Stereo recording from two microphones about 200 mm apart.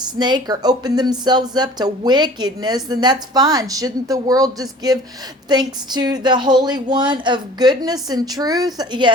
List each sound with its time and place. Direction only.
0.0 s speech: 20° right (ahead or behind)